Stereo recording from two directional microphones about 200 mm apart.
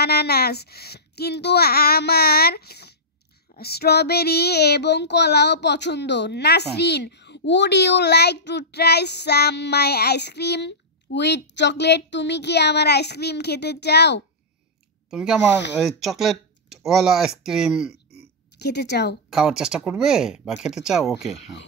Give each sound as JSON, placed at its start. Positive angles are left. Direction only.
{"t": 0.0, "sound": "a child's voice", "side_deg": 55}
{"t": 3.5, "sound": "child singing", "side_deg": 50}
{"t": 15.0, "sound": "speech", "side_deg": -5}
{"t": 18.6, "sound": "child singing", "side_deg": 55}
{"t": 19.3, "sound": "speech", "side_deg": -5}